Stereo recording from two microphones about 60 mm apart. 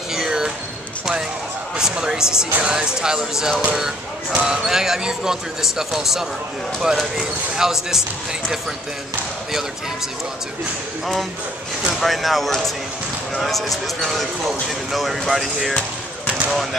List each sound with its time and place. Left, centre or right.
0.1 s basketball bounce: centre
1.8 s speech: centre
4.6 s speech: centre
12.0 s speech: centre